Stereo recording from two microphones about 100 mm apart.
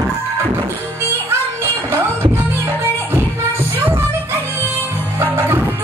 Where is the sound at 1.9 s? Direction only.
25° right (ahead or behind).